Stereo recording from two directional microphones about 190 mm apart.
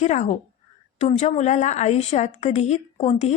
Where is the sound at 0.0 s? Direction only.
40° left (ahead or behind).